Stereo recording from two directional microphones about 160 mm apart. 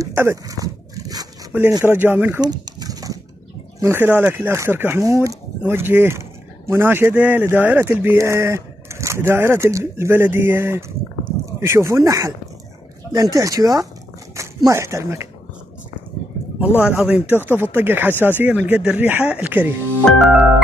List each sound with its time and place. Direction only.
0.0 s dog: 15° right (ahead or behind)
1.5 s speech: 15° right (ahead or behind)
2.4 s a sound: 25° right (ahead or behind)
3.8 s speech: 15° right (ahead or behind)
16.5 s speech: 10° right (ahead or behind)
20.1 s music: 5° right (ahead or behind)